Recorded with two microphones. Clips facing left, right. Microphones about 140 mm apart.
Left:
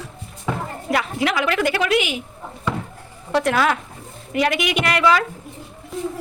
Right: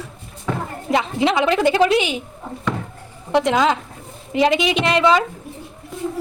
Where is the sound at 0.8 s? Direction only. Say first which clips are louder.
Right 3 dB; 25° right (ahead or behind).